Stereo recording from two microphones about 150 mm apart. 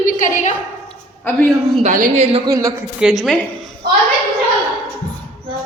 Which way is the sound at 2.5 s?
20° right (ahead or behind).